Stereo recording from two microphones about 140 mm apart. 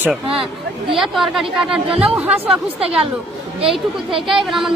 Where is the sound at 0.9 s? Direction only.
Centre (ahead or behind).